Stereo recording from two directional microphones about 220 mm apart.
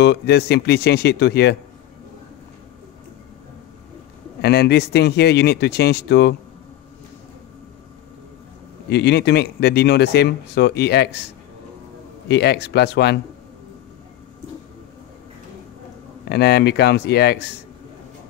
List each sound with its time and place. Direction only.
0.0 s speech: 50° left (ahead or behind)
4.4 s speech: 45° left (ahead or behind)
8.8 s speech: 50° left (ahead or behind)
12.3 s speech: 50° left (ahead or behind)
16.3 s speech: 45° left (ahead or behind)